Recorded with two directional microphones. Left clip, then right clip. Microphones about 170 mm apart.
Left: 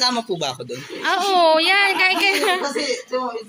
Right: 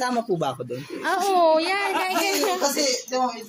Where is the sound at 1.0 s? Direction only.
10° right (ahead or behind).